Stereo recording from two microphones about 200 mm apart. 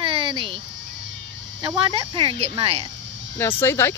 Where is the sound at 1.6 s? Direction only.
20° right (ahead or behind).